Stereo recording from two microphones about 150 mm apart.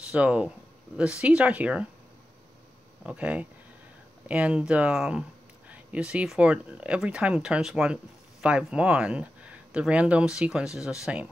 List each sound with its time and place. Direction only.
0.1 s speech: 10° right (ahead or behind)
3.1 s speech: 10° right (ahead or behind)